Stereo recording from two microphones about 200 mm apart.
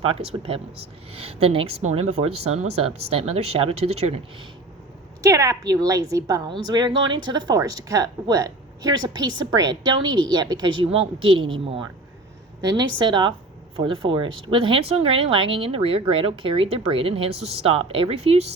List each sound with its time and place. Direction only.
0.0 s speech: 25° right (ahead or behind)
5.2 s a woman's voice: 15° right (ahead or behind)